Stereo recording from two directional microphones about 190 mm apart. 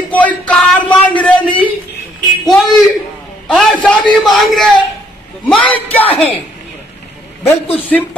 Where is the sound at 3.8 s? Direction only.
5° left (ahead or behind).